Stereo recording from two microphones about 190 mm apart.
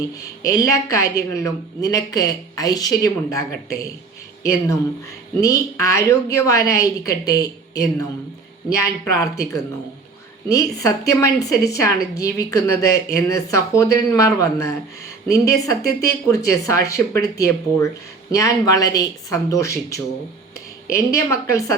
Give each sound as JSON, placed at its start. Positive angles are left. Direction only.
{"t": 0.4, "sound": "a woman's voice", "side_deg": 15}